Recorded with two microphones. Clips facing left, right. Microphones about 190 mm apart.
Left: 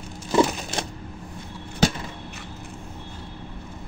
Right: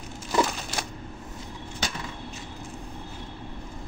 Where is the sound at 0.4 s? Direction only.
25° left (ahead or behind).